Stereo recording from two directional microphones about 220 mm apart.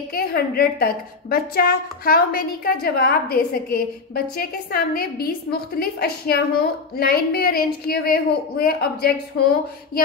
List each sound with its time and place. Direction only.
0.1 s a woman's voice: 45° left (ahead or behind)